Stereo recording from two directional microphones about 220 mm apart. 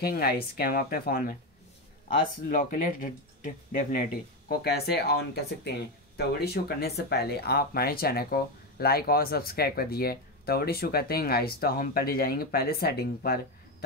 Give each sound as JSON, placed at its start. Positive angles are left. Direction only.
{"t": 0.0, "sound": "speech", "side_deg": 45}
{"t": 2.5, "sound": "speech", "side_deg": 35}